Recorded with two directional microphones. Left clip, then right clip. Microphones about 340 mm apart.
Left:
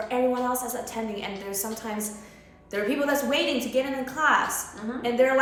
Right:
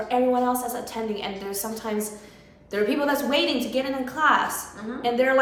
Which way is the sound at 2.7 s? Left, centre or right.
Centre.